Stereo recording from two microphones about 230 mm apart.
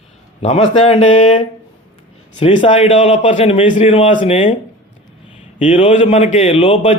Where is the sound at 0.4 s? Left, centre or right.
Left.